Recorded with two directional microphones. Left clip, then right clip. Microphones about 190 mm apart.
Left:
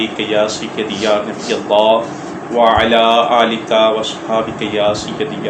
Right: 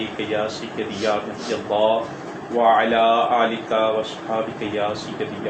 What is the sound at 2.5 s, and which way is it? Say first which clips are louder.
Speech: left 6 dB; 50° left (ahead or behind).